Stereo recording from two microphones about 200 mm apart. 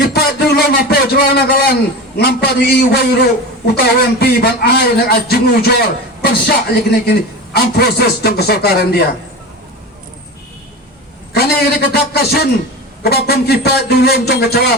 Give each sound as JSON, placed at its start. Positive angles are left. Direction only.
{"t": 0.0, "sound": "a sound", "side_deg": 55}
{"t": 2.1, "sound": "a man's voice", "side_deg": 55}
{"t": 11.3, "sound": "a man's voice", "side_deg": 50}